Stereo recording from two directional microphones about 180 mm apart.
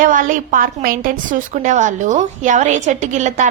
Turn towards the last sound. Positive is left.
turn(degrees=-40)  # may be behind; listen again after turning